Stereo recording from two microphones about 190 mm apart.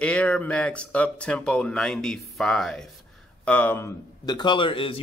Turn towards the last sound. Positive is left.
turn(degrees=30)  # may be behind; listen again after turning